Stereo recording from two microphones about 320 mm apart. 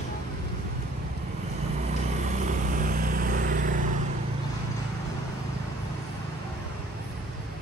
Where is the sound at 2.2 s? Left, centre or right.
Right.